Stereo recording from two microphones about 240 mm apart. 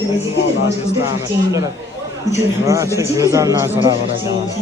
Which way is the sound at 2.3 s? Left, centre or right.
Centre.